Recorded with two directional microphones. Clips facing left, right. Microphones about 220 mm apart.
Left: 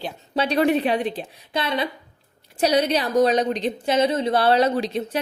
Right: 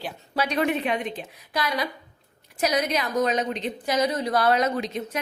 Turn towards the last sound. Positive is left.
turn(degrees=30)  # may be behind; listen again after turning